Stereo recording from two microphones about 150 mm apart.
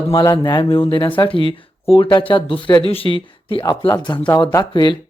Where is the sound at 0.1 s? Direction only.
30° left (ahead or behind).